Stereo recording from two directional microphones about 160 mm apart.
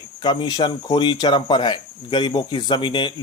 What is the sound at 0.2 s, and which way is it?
A man's voice, 25° left (ahead or behind).